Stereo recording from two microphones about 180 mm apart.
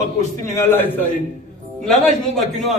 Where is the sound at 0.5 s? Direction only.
10° left (ahead or behind).